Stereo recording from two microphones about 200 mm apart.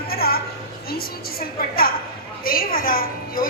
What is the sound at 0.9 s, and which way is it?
A woman's voice, 50° left (ahead or behind).